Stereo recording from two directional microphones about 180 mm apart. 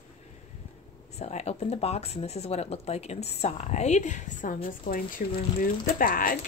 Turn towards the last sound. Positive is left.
turn(degrees=50)  # may be behind; listen again after turning